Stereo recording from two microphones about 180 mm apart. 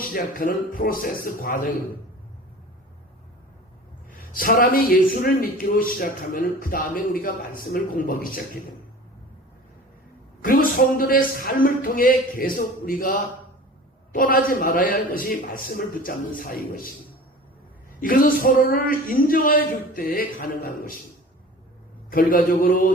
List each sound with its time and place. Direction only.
0.1 s speech: 50° left (ahead or behind)
4.3 s speech: 50° left (ahead or behind)
10.4 s speech: 50° left (ahead or behind)
18.0 s speech: 50° left (ahead or behind)
22.1 s speech: 50° left (ahead or behind)